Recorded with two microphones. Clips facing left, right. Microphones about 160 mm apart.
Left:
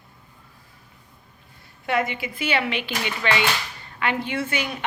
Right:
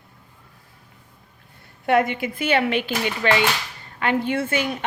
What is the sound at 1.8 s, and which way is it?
Speech, 55° right (ahead or behind).